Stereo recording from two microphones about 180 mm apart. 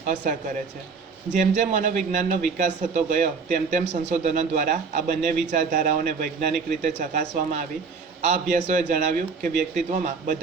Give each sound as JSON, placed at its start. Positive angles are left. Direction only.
{"t": 1.3, "sound": "speech", "side_deg": -45}